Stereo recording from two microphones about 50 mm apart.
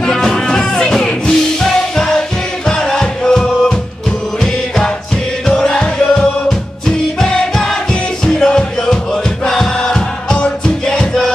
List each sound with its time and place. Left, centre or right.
0.0 s music: centre